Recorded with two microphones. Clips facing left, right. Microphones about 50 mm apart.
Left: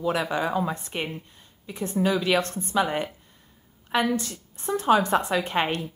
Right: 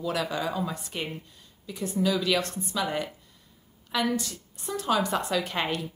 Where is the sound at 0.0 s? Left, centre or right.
Left.